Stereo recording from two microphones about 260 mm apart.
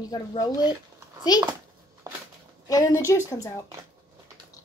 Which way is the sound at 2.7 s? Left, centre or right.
Centre.